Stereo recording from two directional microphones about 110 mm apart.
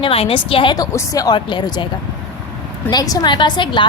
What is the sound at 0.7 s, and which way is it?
Speech, 35° left (ahead or behind).